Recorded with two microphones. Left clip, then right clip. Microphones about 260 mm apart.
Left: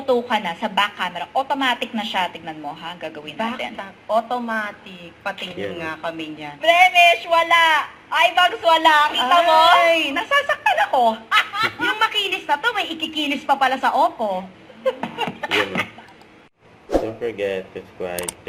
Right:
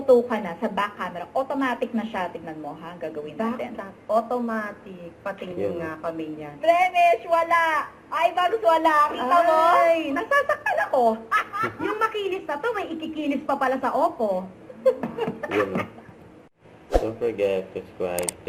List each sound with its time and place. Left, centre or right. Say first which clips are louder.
0.1 s a woman's voice: right 1 dB; centre
16.9 s speech: left 2 dB; centre